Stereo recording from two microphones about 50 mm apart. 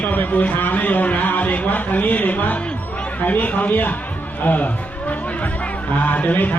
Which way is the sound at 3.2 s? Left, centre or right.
Left.